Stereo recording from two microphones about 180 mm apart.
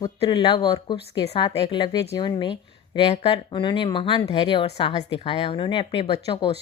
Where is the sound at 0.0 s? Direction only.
25° left (ahead or behind).